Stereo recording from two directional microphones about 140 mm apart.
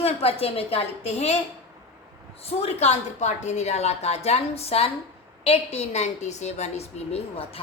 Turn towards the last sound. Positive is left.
turn(degrees=45)  # may be behind; listen again after turning